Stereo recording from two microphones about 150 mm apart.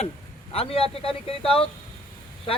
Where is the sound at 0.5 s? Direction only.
40° left (ahead or behind).